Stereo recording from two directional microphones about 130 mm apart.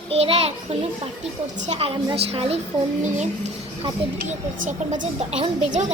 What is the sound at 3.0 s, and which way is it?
Speech, 65° right (ahead or behind).